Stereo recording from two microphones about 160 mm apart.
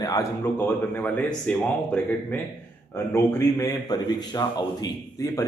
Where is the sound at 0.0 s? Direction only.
20° left (ahead or behind).